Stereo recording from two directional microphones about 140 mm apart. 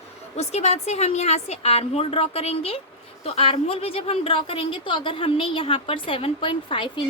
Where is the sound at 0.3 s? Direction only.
50° left (ahead or behind).